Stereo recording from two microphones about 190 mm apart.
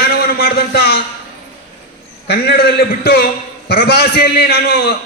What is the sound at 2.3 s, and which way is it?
A man's voice, 55° left (ahead or behind).